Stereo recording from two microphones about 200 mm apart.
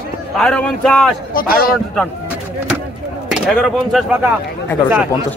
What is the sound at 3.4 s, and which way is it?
Speech, centre (ahead or behind).